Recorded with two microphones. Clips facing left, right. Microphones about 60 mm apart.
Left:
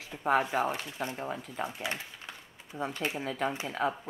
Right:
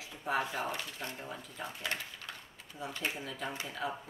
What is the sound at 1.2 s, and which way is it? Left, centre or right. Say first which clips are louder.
Speech: left 7 dB; left.